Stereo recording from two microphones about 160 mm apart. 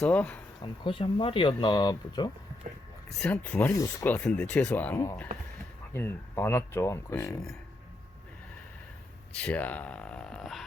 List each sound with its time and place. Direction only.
0.0 s speech: 10° left (ahead or behind)
0.6 s speech: 30° left (ahead or behind)
3.1 s speech: 5° left (ahead or behind)
9.3 s speech: 10° left (ahead or behind)